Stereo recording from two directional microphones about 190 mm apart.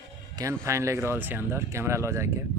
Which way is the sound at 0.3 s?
15° right (ahead or behind).